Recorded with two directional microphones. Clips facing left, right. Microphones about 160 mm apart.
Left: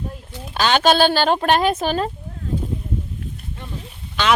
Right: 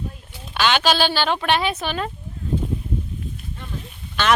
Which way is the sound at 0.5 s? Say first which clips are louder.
Left 3 dB; 40° left (ahead or behind).